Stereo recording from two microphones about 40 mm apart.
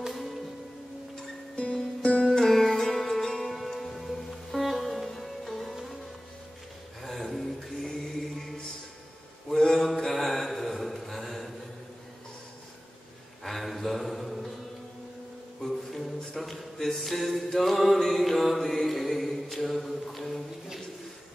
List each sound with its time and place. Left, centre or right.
1.7 s music: left
2.2 s music: centre
7.0 s a sound: centre
9.5 s mantra: centre
13.4 s a sound: centre
15.6 s music: centre
17.9 s mantra: centre